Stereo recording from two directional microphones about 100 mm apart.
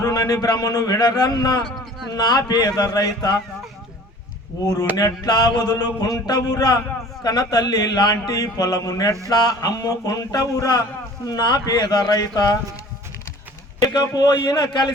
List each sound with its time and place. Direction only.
0.0 s speech: 40° left (ahead or behind)
1.6 s a sound: centre (ahead or behind)
2.1 s speech: 40° left (ahead or behind)
4.6 s speech: 35° left (ahead or behind)
13.8 s speech: 40° left (ahead or behind)